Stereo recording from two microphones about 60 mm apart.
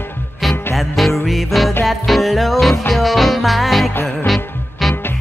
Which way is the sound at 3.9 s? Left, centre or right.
Left.